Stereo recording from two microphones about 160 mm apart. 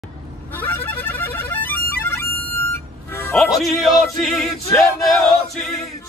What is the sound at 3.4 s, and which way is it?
Choir, centre (ahead or behind).